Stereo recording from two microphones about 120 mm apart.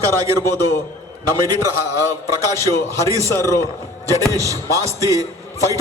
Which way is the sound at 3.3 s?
25° left (ahead or behind).